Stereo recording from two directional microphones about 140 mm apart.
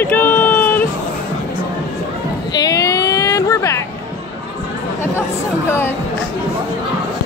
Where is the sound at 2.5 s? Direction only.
25° left (ahead or behind).